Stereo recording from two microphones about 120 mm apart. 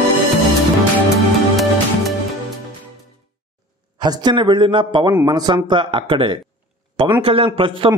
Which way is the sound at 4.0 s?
35° right (ahead or behind).